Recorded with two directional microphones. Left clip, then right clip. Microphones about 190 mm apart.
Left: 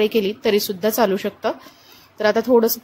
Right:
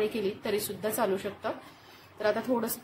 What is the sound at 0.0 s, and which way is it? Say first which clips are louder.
Speech: left 12 dB; 35° left (ahead or behind).